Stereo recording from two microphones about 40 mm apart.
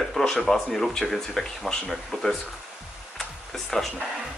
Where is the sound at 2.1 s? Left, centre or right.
Centre.